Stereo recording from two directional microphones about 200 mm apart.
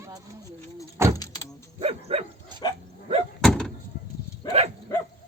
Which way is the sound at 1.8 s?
30° right (ahead or behind).